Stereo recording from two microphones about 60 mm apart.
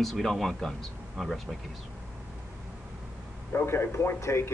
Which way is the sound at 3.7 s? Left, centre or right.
Left.